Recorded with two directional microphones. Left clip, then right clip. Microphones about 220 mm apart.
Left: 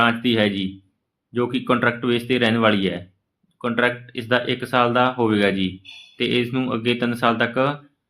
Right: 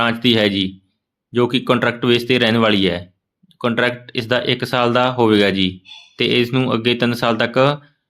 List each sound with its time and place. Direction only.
0.0 s speech: 45° right (ahead or behind)